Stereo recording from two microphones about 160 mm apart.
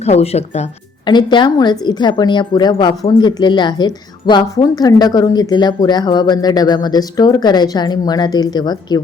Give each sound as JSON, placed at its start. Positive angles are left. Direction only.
{"t": 0.0, "sound": "speech", "side_deg": 40}
{"t": 1.0, "sound": "a woman's voice", "side_deg": 30}